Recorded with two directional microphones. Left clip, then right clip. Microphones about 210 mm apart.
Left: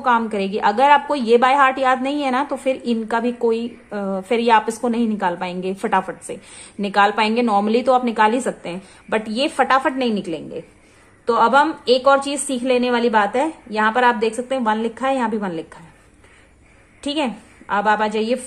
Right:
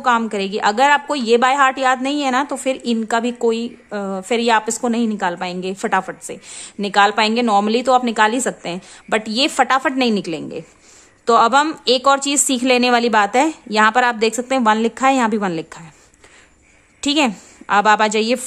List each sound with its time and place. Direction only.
0.0 s a woman's voice: 25° right (ahead or behind)
17.0 s a woman's voice: 35° right (ahead or behind)